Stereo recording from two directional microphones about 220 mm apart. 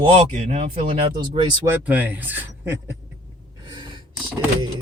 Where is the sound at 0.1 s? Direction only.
30° right (ahead or behind); by 2.9 s 10° right (ahead or behind).